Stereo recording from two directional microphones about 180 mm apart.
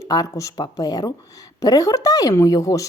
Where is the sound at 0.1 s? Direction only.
20° left (ahead or behind).